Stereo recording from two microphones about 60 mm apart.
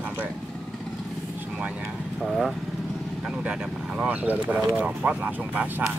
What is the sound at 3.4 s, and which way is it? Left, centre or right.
Speech, centre.